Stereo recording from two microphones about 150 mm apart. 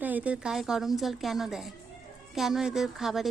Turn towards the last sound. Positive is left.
turn(degrees=0)  # may be behind; listen again after turning